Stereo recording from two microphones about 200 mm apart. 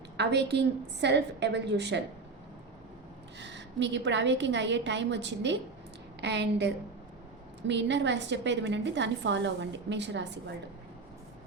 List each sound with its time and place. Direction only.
0.2 s a woman's voice: 60° right (ahead or behind)
3.3 s a woman's voice: 60° right (ahead or behind)